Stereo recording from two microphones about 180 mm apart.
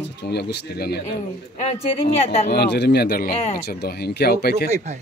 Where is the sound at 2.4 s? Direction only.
70° left (ahead or behind).